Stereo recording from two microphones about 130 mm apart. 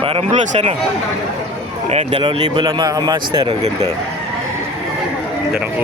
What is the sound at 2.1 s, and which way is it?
Speech, 40° right (ahead or behind).